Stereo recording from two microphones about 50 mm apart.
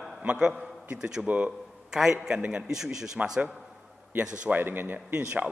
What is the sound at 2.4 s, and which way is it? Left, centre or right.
Speech, right.